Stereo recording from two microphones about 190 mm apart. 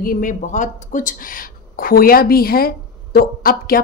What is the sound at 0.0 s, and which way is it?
A woman's voice, 50° left (ahead or behind).